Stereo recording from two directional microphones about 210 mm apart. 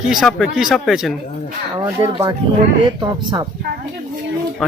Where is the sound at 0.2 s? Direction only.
Centre (ahead or behind).